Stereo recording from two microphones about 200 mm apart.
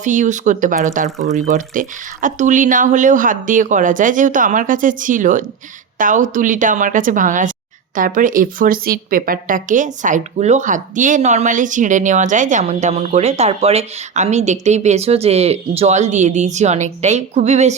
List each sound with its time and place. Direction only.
0.0 s a woman's voice: 40° right (ahead or behind)